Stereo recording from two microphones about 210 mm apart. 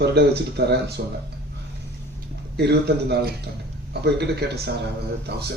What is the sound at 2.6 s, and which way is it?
Speech, 50° right (ahead or behind).